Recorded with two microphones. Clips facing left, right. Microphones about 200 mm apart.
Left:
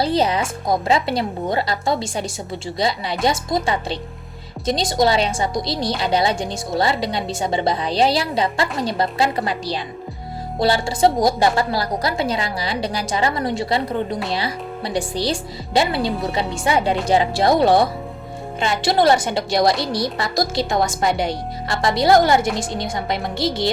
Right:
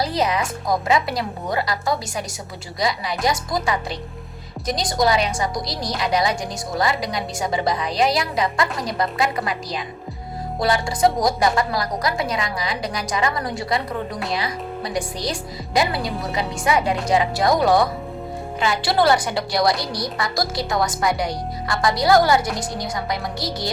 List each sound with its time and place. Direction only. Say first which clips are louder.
0.0 s a woman's voice: left 3 dB; 30° left (ahead or behind)